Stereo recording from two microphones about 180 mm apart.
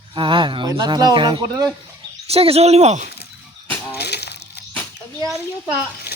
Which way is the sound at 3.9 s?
65° left (ahead or behind).